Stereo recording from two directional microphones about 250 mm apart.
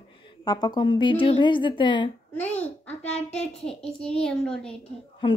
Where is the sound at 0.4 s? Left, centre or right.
Centre.